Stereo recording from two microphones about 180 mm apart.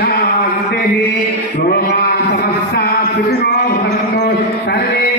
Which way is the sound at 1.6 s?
60° left (ahead or behind).